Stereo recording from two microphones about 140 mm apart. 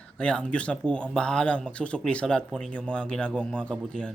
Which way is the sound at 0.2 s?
5° left (ahead or behind).